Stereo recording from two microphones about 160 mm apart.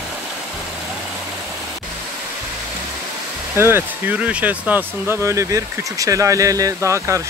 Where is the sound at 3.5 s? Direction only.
15° right (ahead or behind).